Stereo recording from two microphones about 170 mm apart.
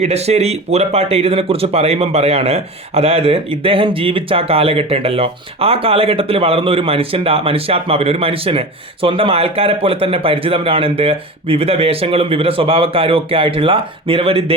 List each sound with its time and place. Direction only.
0.0 s speech: 40° right (ahead or behind)